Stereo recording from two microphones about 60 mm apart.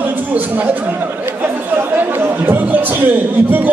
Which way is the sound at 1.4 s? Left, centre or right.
Right.